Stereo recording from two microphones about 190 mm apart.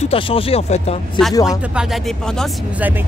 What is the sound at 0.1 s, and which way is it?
Speech, 30° left (ahead or behind).